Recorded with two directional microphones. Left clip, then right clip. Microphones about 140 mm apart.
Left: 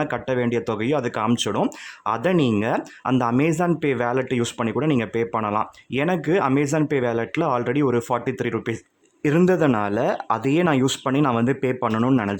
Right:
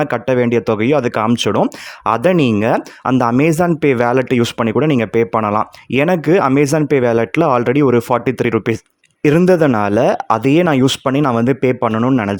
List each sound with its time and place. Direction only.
0.0 s speech: 45° right (ahead or behind)